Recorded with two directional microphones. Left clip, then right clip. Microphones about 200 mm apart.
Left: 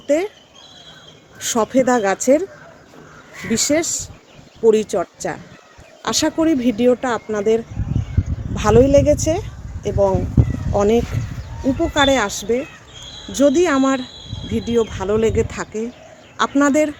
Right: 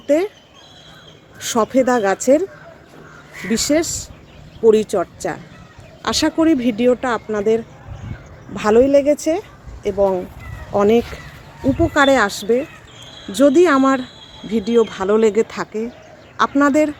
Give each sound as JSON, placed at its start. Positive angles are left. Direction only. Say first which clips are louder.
{"t": 0.1, "sound": "speech", "louder": "right 2 dB", "side_deg": -20}
{"t": 1.4, "sound": "speech", "louder": "right 1 dB", "side_deg": -15}